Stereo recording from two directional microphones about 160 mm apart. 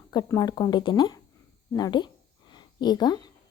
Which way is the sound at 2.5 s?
25° left (ahead or behind).